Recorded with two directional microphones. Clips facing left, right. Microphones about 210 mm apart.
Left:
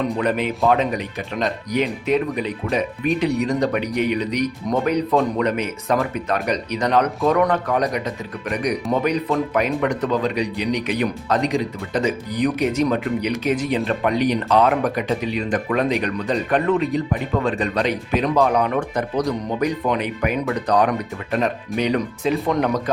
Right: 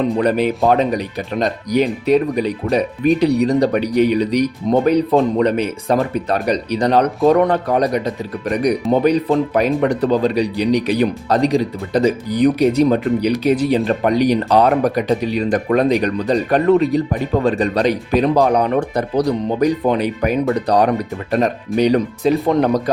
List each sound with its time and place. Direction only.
0.2 s speech: 35° right (ahead or behind)